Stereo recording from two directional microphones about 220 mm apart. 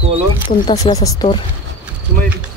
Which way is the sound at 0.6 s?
20° left (ahead or behind).